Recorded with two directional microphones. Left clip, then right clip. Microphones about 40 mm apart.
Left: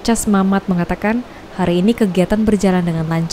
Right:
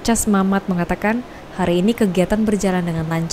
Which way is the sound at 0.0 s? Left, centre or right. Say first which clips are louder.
Left 2 dB; centre.